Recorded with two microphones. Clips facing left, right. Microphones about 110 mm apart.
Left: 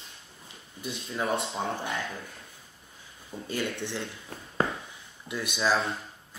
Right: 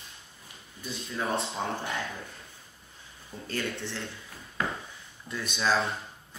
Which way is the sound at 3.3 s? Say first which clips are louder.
Left 3 dB; 15° left (ahead or behind).